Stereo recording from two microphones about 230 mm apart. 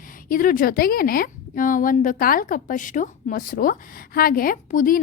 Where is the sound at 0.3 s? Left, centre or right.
Left.